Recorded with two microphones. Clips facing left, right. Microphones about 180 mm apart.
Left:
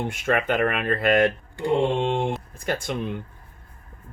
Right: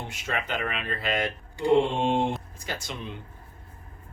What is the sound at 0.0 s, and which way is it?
Speech, 55° left (ahead or behind).